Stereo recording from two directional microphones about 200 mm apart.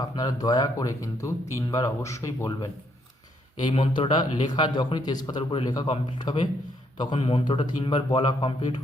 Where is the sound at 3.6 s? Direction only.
25° left (ahead or behind).